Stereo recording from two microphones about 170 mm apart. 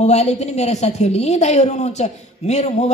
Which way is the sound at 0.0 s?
40° left (ahead or behind).